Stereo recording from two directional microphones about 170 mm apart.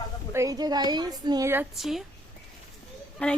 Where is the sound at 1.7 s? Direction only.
Centre (ahead or behind).